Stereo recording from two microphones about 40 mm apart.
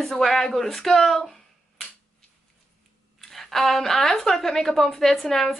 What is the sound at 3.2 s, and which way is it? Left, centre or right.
Speech, centre.